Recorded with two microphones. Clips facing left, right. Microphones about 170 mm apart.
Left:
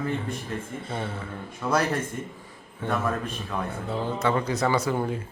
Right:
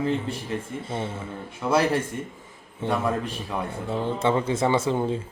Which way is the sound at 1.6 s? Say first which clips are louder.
Right 2 dB; 20° right (ahead or behind).